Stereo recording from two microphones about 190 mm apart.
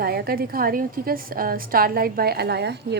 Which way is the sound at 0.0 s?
55° right (ahead or behind).